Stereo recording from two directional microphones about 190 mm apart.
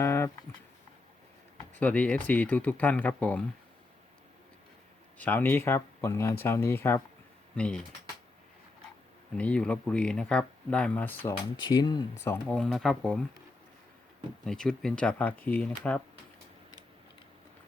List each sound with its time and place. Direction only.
0.0 s a sound: 15° left (ahead or behind)
1.7 s speech: 10° left (ahead or behind)
5.1 s speech: 10° left (ahead or behind)
9.3 s speech: 5° left (ahead or behind)
11.7 s speech: 25° left (ahead or behind)
12.2 s speech: 10° left (ahead or behind)
14.4 s speech: 5° left (ahead or behind)